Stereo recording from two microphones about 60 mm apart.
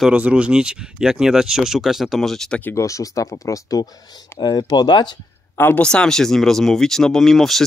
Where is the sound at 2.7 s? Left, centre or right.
Left.